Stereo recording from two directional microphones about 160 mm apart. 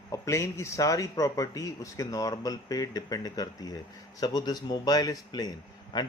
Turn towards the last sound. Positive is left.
turn(degrees=25)  # may be behind; listen again after turning